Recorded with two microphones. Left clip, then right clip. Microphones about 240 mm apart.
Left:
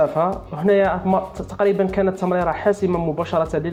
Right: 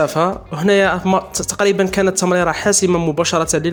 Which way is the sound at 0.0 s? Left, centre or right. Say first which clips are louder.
Right 2 dB; right.